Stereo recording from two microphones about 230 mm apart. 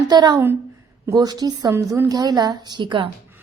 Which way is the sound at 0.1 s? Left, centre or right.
Centre.